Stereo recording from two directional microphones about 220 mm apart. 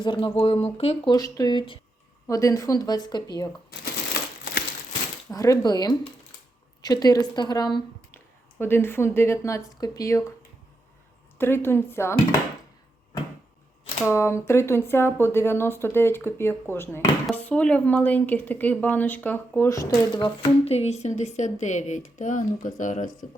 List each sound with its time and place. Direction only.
0.0 s speech: 20° left (ahead or behind)
5.3 s speech: 15° left (ahead or behind)
11.3 s speech: 10° left (ahead or behind)
14.0 s a woman's voice: 10° left (ahead or behind); by 23.1 s 35° left (ahead or behind)